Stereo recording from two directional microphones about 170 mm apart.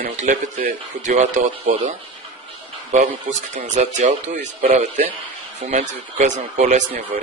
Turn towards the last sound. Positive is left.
turn(degrees=-40)  # may be behind; listen again after turning